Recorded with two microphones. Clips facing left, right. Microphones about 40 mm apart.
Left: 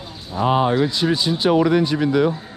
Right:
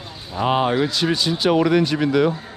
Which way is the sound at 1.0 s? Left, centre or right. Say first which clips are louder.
Left 1 dB; right.